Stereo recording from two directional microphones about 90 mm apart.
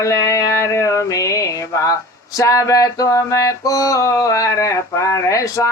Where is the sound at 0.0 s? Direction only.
35° left (ahead or behind).